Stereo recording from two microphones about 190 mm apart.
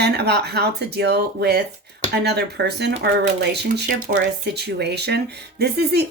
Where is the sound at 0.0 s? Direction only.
60° right (ahead or behind).